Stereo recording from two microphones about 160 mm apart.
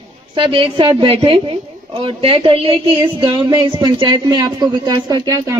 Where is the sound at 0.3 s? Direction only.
30° right (ahead or behind).